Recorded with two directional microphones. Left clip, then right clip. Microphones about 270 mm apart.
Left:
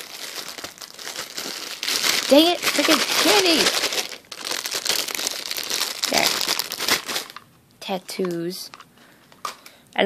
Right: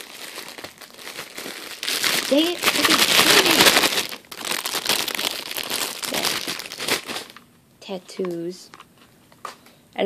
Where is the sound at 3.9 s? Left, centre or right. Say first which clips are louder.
Right 2 dB; centre.